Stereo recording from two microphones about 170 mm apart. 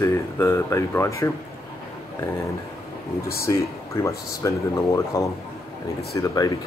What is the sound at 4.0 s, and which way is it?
Speech, 20° left (ahead or behind).